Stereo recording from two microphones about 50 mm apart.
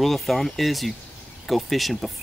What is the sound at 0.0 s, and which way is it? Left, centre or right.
Speech, centre.